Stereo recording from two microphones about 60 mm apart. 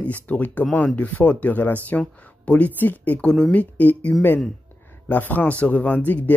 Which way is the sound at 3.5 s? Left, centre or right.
Left.